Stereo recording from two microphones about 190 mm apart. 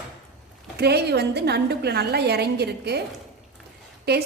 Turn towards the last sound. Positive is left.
turn(degrees=-60)  # may be behind; listen again after turning